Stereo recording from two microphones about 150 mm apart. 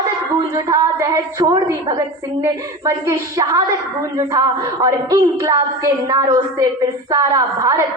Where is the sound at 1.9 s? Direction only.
25° right (ahead or behind).